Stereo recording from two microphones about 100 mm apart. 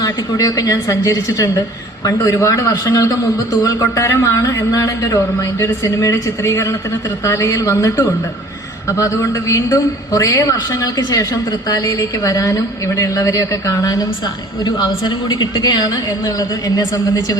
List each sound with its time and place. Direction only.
0.0 s speech: 40° left (ahead or behind)
14.6 s speech: 45° left (ahead or behind)